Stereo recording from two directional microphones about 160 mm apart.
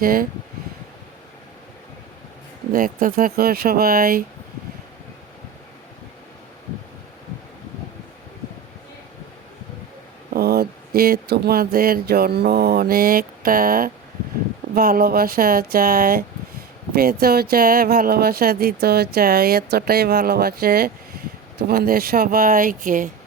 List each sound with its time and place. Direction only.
0.0 s speech: 65° right (ahead or behind)
2.7 s speech: 65° right (ahead or behind)
10.3 s speech: 75° right (ahead or behind); by 23.0 s 60° right (ahead or behind)